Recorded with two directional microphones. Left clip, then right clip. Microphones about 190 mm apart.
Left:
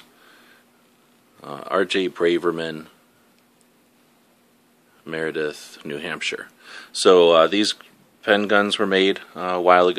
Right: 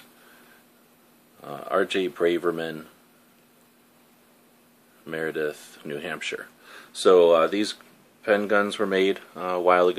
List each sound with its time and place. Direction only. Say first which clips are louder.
1.4 s speech: left 3 dB; 30° left (ahead or behind)
5.0 s speech: left 3 dB; 25° left (ahead or behind)